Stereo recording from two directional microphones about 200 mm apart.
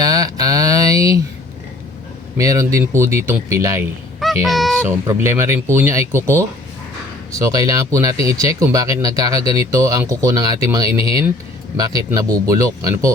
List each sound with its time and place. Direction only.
0.0 s a sound: 20° right (ahead or behind)
2.4 s speech: 15° right (ahead or behind)
4.2 s speech: centre (ahead or behind)
5.0 s speech: 15° right (ahead or behind)